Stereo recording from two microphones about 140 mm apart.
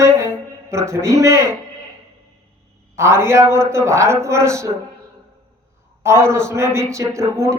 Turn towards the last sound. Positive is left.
turn(degrees=-20)  # may be behind; listen again after turning